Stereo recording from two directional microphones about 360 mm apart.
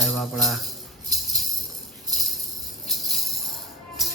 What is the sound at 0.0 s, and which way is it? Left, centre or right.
Speech, centre.